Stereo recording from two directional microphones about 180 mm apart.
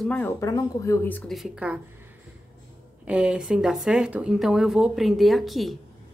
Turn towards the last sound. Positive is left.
turn(degrees=0)  # may be behind; listen again after turning